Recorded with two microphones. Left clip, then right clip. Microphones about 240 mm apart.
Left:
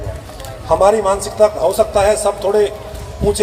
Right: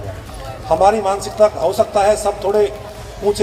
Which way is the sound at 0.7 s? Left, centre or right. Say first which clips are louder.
Left 1 dB; left.